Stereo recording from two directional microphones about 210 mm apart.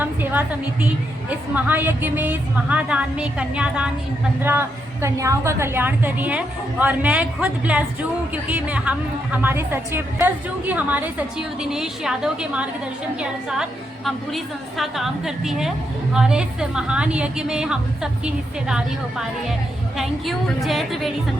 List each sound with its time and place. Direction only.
0.0 s a woman's voice: 10° right (ahead or behind)
20.0 s a woman's voice: centre (ahead or behind)